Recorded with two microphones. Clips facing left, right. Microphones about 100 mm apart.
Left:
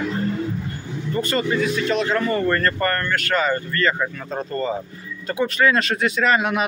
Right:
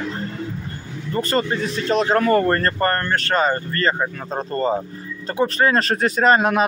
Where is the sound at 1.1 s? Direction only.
35° right (ahead or behind).